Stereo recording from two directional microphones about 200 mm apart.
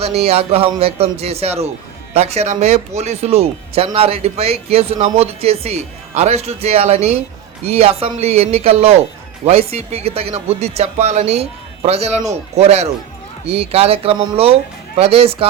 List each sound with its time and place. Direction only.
0.0 s speech: 30° right (ahead or behind)